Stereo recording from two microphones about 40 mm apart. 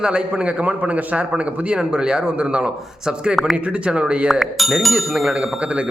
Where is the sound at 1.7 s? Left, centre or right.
Right.